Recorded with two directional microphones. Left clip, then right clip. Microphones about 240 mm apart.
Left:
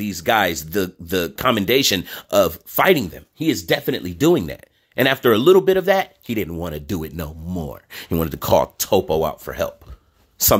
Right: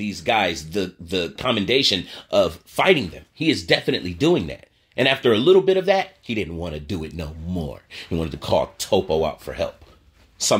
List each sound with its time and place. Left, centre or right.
0.0 s speech: left
3.6 s speech: centre
4.2 s speech: left
8.0 s speech: left